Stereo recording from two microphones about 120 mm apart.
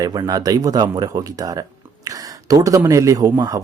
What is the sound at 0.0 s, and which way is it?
A man's voice, 35° right (ahead or behind).